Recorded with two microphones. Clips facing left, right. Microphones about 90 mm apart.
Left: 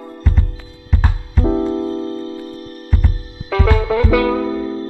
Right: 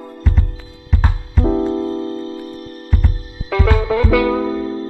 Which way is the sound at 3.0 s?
15° left (ahead or behind).